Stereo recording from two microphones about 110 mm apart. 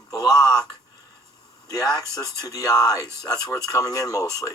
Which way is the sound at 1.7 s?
35° left (ahead or behind).